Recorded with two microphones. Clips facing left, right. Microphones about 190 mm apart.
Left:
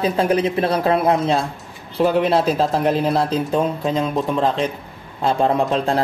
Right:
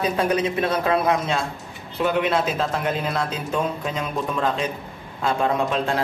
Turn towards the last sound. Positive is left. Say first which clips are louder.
# left 4 dB
turn(degrees=35)  # may be behind; listen again after turning